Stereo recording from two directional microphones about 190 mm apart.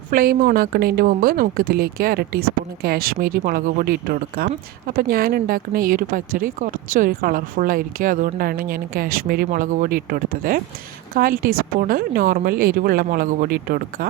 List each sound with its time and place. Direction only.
0.1 s a woman's voice: 50° right (ahead or behind)